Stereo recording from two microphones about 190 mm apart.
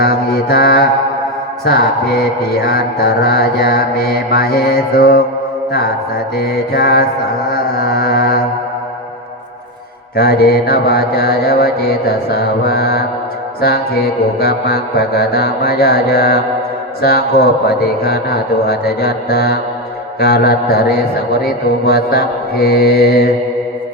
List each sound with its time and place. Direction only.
0.0 s mantra: 55° left (ahead or behind)
6.3 s mantra: 55° left (ahead or behind)
10.2 s mantra: 55° left (ahead or behind)